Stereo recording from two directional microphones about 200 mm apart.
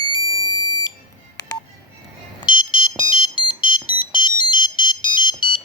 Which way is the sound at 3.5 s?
25° left (ahead or behind).